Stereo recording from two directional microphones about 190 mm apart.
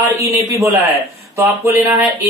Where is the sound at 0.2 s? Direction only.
15° right (ahead or behind).